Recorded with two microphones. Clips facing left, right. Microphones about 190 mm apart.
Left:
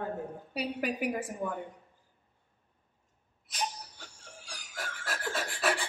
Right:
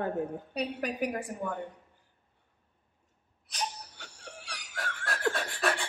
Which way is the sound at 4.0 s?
70° right (ahead or behind).